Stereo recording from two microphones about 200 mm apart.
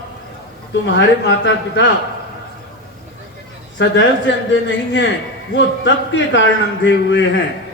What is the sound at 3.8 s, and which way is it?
A man's voice, 65° left (ahead or behind).